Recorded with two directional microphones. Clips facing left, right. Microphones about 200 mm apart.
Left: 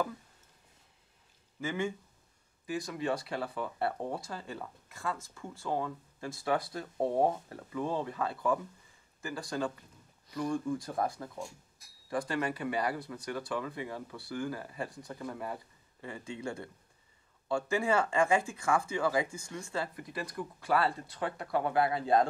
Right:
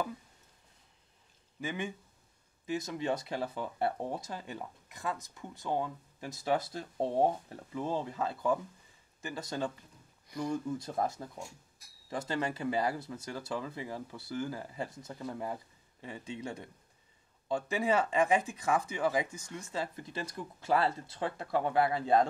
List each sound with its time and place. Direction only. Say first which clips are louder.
1.6 s speech: left 3 dB; 20° right (ahead or behind)
10.2 s a sound: left 1 dB; 10° right (ahead or behind)
10.7 s speech: left 1 dB; 20° right (ahead or behind)